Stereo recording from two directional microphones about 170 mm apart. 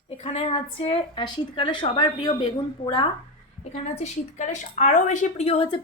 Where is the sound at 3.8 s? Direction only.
45° left (ahead or behind).